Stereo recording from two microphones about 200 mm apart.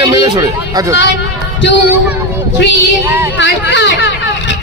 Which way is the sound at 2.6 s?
60° left (ahead or behind).